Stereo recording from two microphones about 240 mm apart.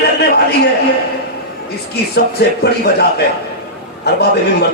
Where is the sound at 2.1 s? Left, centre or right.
Left.